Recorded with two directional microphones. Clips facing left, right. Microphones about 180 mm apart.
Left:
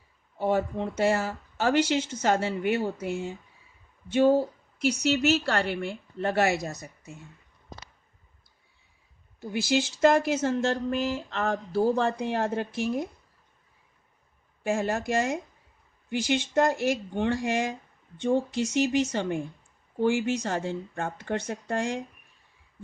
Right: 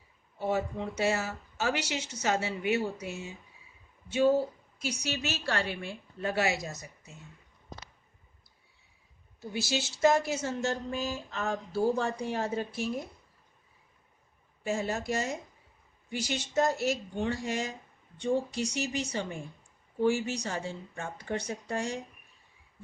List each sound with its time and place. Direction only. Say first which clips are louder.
0.3 s speech: left 5 dB; 50° left (ahead or behind)
4.8 s a woman's voice: left 10 dB; 65° left (ahead or behind)
9.4 s a woman's voice: left 7 dB; 55° left (ahead or behind)
10.7 s a woman's voice: left 6 dB; 75° left (ahead or behind); by 13.1 s 55° left (ahead or behind)
14.7 s speech: left 4 dB; 55° left (ahead or behind)
16.6 s speech: left 2 dB; 55° left (ahead or behind)